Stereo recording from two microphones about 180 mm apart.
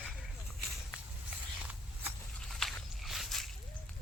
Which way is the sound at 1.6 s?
10° right (ahead or behind).